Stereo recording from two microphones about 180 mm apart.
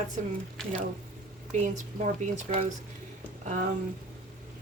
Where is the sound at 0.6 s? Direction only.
5° left (ahead or behind).